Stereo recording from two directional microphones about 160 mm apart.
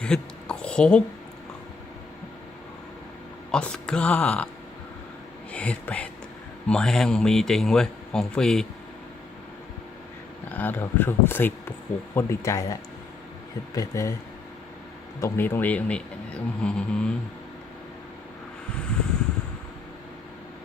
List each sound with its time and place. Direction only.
0.0 s a sound: 5° left (ahead or behind)
3.5 s speech: 5° left (ahead or behind)
5.5 s speech: 10° left (ahead or behind)
10.5 s speech: 10° left (ahead or behind)
15.2 s speech: 15° left (ahead or behind)